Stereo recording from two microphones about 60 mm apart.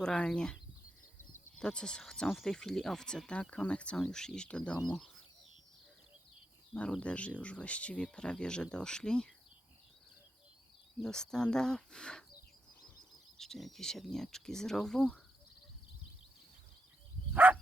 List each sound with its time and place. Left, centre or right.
0.0 s speech: centre
7.0 s speech: centre
11.0 s speech: centre
13.4 s speech: centre
17.3 s dog: right